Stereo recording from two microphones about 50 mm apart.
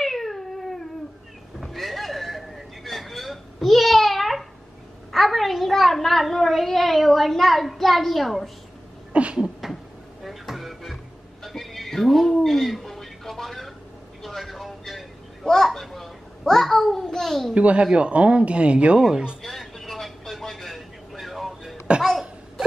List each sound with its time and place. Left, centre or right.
0.0 s cat: centre
1.6 s a sound: centre
5.1 s a child's voice: centre
9.1 s a sound: right
10.2 s a sound: centre
14.2 s vehicle: centre
15.4 s babbling: centre
17.6 s speech: right
19.4 s vehicle: centre